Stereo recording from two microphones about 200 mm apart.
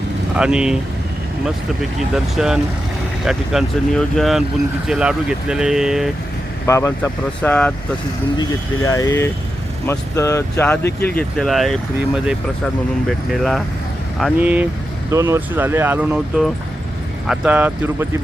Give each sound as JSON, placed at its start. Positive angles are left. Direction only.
{"t": 0.3, "sound": "speech", "side_deg": -5}
{"t": 2.1, "sound": "speech", "side_deg": 0}
{"t": 6.7, "sound": "speech", "side_deg": 15}
{"t": 8.4, "sound": "speech", "side_deg": 15}